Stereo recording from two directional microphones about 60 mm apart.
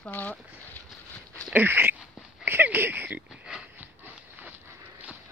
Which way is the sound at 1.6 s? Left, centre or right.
Right.